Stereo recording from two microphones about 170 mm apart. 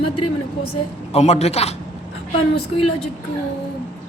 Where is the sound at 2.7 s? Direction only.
30° left (ahead or behind).